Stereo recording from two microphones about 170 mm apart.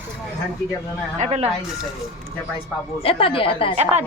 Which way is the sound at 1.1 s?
40° right (ahead or behind).